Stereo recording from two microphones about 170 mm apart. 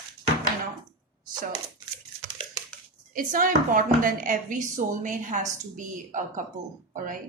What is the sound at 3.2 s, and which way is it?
A woman's voice, 55° right (ahead or behind).